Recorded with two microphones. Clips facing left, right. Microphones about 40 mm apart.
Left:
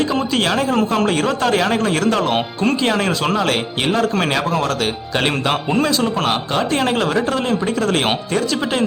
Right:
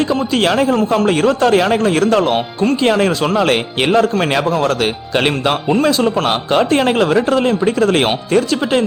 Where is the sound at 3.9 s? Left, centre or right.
Centre.